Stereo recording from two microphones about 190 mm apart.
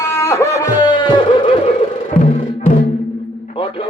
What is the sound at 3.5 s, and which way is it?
Music, 30° left (ahead or behind).